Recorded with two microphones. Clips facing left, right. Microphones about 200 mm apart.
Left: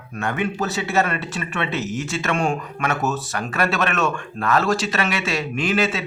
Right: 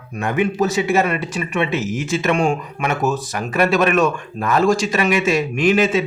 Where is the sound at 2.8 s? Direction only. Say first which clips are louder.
Right 3 dB; 15° right (ahead or behind).